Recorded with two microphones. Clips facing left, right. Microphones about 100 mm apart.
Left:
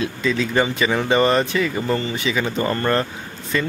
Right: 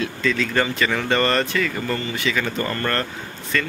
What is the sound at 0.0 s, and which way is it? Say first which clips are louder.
Speech: left 1 dB; 15° left (ahead or behind).